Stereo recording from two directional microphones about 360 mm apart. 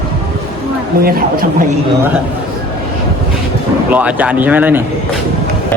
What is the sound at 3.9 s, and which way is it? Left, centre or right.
Speech, centre.